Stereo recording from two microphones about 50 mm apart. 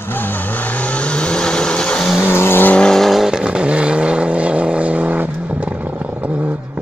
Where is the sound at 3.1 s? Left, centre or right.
Centre; by 5.3 s right.